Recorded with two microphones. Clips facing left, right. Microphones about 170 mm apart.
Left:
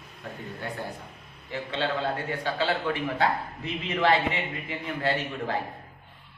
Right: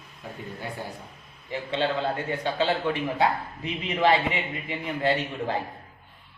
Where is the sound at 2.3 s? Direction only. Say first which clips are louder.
Right 4 dB; 20° right (ahead or behind).